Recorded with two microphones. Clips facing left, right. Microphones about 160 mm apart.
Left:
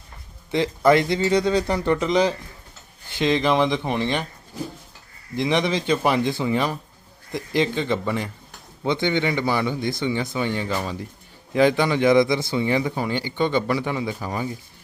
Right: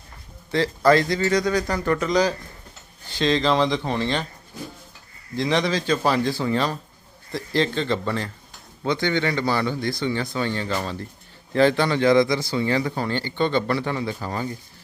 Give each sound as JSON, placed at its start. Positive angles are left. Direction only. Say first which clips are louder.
{"t": 0.5, "sound": "speech", "louder": "even", "side_deg": 20}
{"t": 5.4, "sound": "speech", "louder": "even", "side_deg": 20}